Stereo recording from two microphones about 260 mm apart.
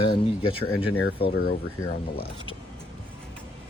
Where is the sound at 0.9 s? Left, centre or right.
Left.